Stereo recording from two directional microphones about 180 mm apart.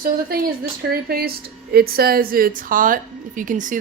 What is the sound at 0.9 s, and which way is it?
A woman's voice, 60° right (ahead or behind).